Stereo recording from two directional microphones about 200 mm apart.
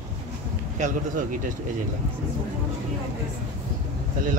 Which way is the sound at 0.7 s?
40° right (ahead or behind).